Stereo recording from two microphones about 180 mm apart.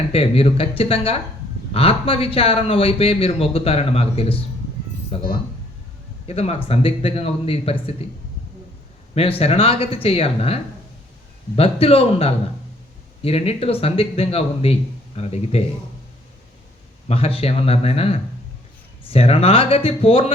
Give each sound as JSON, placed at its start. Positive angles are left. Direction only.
{"t": 0.1, "sound": "speech", "side_deg": 35}
{"t": 9.1, "sound": "speech", "side_deg": 30}
{"t": 17.1, "sound": "speech", "side_deg": 35}